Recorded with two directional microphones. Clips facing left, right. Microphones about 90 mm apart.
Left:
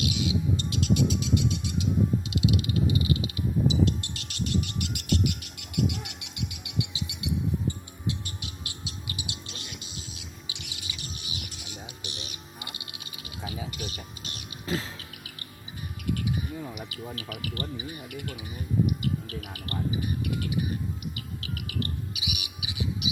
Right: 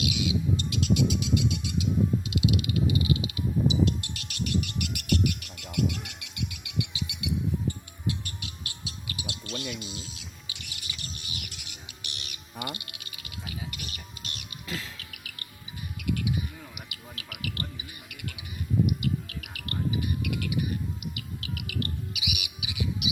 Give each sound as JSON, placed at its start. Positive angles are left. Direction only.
{"t": 0.0, "sound": "music", "side_deg": 35}
{"t": 5.9, "sound": "a sound", "side_deg": 20}
{"t": 8.0, "sound": "music", "side_deg": 25}
{"t": 16.9, "sound": "speech", "side_deg": 35}
{"t": 18.9, "sound": "bird", "side_deg": 35}
{"t": 21.2, "sound": "music", "side_deg": 35}